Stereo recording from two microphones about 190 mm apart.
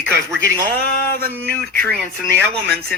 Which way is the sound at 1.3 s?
10° left (ahead or behind).